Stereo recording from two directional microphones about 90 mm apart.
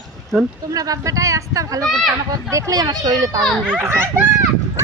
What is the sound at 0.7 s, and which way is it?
A child's voice, 40° right (ahead or behind).